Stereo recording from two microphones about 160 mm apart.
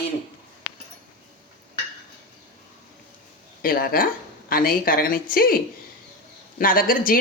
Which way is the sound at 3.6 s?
65° left (ahead or behind).